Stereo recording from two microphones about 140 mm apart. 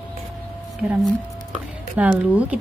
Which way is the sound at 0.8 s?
5° right (ahead or behind).